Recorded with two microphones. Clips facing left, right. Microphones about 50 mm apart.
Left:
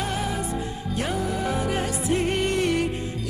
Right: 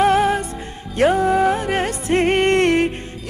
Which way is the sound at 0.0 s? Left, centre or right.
Right.